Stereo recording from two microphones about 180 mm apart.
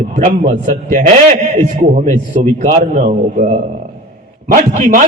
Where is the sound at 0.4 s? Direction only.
40° right (ahead or behind).